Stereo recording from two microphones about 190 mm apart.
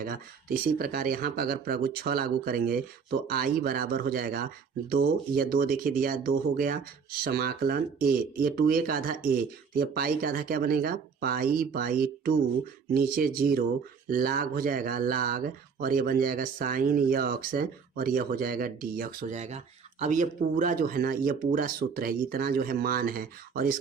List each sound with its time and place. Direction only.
0.0 s speech: 50° right (ahead or behind)